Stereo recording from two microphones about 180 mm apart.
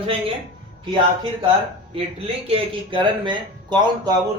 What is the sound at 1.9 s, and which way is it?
Speech, 30° right (ahead or behind).